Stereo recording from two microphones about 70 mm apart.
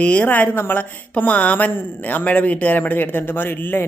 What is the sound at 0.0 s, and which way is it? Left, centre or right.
A woman's voice, centre.